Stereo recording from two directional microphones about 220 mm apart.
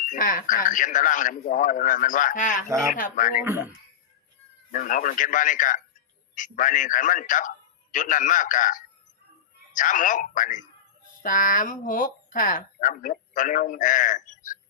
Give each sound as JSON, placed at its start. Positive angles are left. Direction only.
{"t": 0.1, "sound": "speech", "side_deg": 40}
{"t": 2.6, "sound": "speech", "side_deg": -15}
{"t": 2.9, "sound": "speech", "side_deg": 35}
{"t": 3.4, "sound": "speech", "side_deg": -10}
{"t": 4.7, "sound": "speech", "side_deg": 35}